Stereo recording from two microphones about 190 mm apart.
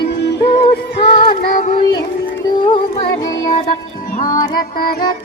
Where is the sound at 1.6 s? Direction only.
30° left (ahead or behind).